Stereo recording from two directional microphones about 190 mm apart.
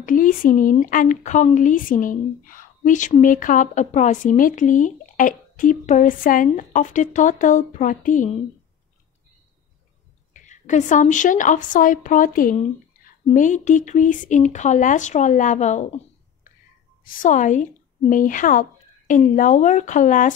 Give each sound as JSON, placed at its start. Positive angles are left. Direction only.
{"t": 0.0, "sound": "speech", "side_deg": 45}
{"t": 10.3, "sound": "speech", "side_deg": 40}
{"t": 17.0, "sound": "a woman's voice", "side_deg": 45}